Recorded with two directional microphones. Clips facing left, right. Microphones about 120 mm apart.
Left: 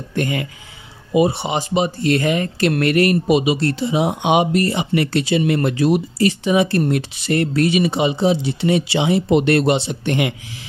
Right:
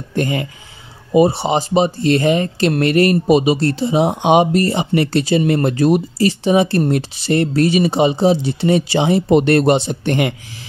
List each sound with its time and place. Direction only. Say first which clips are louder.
0.1 s speech: right 3 dB; 30° right (ahead or behind)
6.1 s speech: right 2 dB; 35° right (ahead or behind)